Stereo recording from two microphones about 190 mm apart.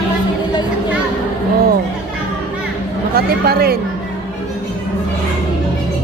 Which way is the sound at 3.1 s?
55° right (ahead or behind).